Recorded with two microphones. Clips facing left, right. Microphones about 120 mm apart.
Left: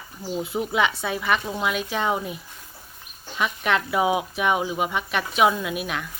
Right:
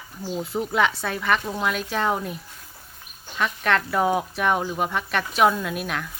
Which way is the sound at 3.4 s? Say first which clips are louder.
Right 1 dB; 5° left (ahead or behind).